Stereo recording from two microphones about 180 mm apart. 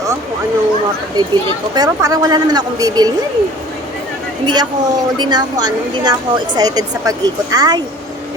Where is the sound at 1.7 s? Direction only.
20° right (ahead or behind).